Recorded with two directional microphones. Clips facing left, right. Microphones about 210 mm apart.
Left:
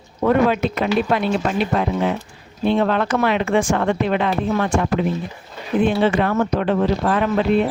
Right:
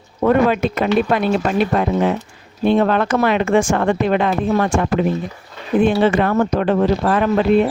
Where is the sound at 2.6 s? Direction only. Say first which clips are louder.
Right 3 dB; 50° right (ahead or behind).